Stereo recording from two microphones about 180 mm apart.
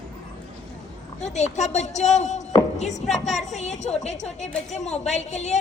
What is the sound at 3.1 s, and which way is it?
Speech, centre (ahead or behind).